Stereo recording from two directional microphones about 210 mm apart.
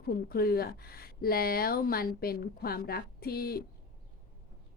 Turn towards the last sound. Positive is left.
turn(degrees=45)  # may be behind; listen again after turning